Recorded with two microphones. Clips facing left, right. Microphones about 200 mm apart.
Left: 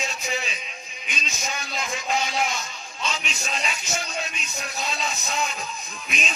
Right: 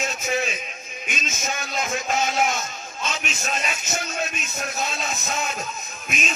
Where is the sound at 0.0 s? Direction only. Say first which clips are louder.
Right 5 dB; 45° right (ahead or behind).